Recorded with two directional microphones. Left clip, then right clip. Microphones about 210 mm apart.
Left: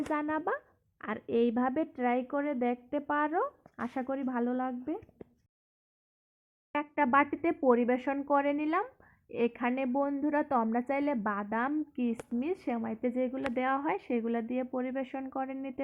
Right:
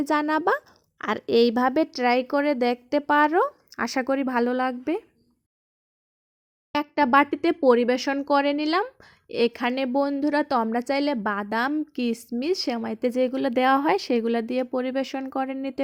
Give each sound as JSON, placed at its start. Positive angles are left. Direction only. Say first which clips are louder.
{"t": 0.1, "sound": "speech", "louder": "right 11 dB", "side_deg": -50}
{"t": 6.7, "sound": "speech", "louder": "right 7 dB", "side_deg": -55}
{"t": 7.4, "sound": "speech", "louder": "right 8 dB", "side_deg": -40}